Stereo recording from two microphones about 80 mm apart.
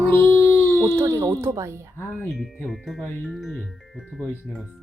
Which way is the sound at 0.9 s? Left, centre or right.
Right.